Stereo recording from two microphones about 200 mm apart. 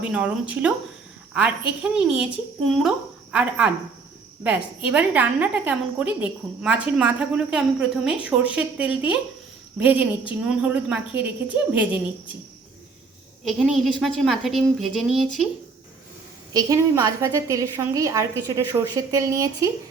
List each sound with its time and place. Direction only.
0.0 s a woman's voice: 5° right (ahead or behind)
4.4 s a woman's voice: 5° right (ahead or behind)
13.4 s speech: centre (ahead or behind)
16.5 s a woman's voice: 20° right (ahead or behind)